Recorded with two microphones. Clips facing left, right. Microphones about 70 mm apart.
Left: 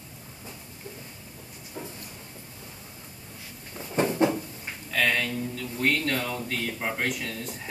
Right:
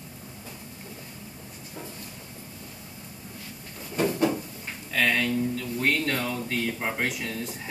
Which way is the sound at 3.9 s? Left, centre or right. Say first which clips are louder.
Left 1 dB; left.